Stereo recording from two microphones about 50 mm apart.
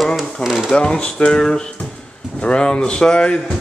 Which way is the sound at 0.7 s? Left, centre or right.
Centre.